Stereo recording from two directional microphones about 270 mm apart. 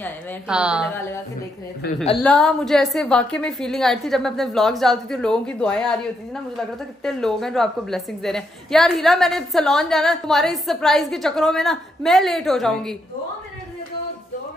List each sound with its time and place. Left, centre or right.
0.5 s a woman's voice: centre
0.9 s a woman's voice: centre
1.8 s a woman's voice: left
2.1 s a woman's voice: centre